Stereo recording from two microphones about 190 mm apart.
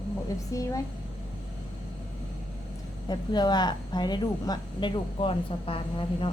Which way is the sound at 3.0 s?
20° left (ahead or behind).